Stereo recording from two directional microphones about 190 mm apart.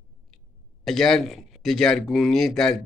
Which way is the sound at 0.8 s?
Centre (ahead or behind).